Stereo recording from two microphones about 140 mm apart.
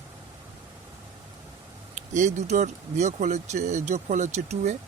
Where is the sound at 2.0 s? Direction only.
60° right (ahead or behind).